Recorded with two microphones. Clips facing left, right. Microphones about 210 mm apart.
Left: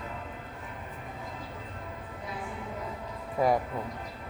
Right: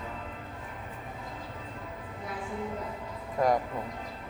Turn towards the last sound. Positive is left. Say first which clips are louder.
# even
turn(degrees=5)  # may be behind; listen again after turning